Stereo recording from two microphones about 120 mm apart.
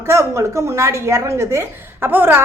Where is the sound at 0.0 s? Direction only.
20° right (ahead or behind).